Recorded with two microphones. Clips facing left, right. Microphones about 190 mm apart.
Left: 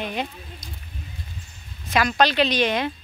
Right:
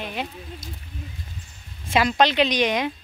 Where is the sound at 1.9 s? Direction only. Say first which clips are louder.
Right 1 dB; 25° right (ahead or behind).